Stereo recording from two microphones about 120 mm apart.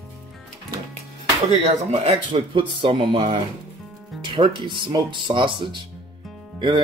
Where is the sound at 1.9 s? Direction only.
50° right (ahead or behind).